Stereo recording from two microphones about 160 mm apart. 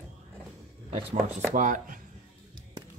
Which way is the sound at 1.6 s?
55° right (ahead or behind).